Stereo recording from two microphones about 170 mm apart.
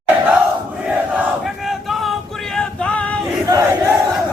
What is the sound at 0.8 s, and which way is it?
Battle cry, 5° right (ahead or behind).